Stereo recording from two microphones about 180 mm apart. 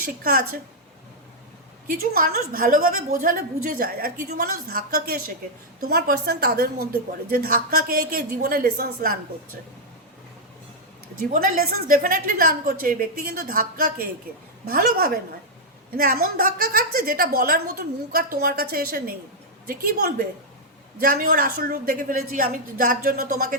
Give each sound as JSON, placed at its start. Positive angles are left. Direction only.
{"t": 0.0, "sound": "a woman's voice", "side_deg": -55}
{"t": 1.9, "sound": "a woman's voice", "side_deg": -55}
{"t": 11.2, "sound": "a woman's voice", "side_deg": -50}